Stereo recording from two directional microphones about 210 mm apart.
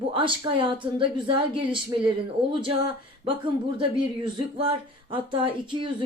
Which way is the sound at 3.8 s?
25° right (ahead or behind).